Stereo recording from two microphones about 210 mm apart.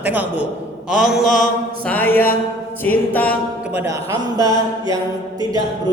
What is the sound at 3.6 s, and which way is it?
A man's voice, 10° right (ahead or behind).